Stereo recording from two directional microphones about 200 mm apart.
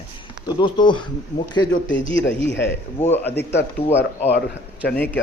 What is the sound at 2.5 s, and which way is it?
Speech, 60° left (ahead or behind).